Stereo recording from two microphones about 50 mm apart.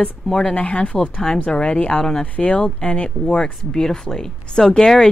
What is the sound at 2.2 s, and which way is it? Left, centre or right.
Speech, left.